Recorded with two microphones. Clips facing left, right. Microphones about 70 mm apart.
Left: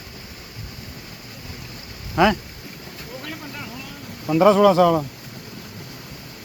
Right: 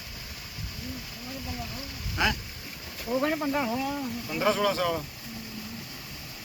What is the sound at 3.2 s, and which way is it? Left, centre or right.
Speech, right.